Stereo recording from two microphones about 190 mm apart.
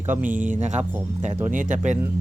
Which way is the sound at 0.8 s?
10° right (ahead or behind).